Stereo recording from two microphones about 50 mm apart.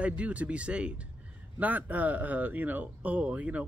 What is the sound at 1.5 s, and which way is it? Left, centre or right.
Speech, right.